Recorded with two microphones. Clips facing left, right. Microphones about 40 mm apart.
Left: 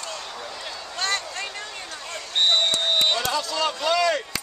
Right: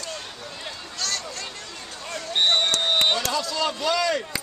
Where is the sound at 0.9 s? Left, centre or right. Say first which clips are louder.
Left 5 dB; left.